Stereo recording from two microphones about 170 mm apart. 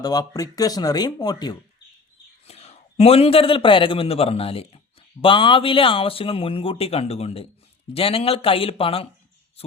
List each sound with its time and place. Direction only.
0.0 s speech: 20° left (ahead or behind)
2.5 s a man's voice: 35° left (ahead or behind)